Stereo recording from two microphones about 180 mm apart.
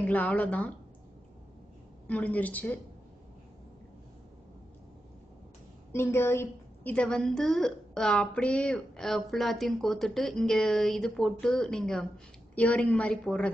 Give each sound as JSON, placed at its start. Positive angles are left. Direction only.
{"t": 0.0, "sound": "a woman's voice", "side_deg": 10}
{"t": 2.0, "sound": "a woman's voice", "side_deg": 10}
{"t": 6.1, "sound": "a woman's voice", "side_deg": 15}